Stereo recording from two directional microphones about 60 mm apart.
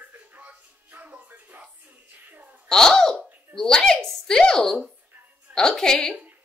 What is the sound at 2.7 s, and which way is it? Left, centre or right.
Laughter, centre.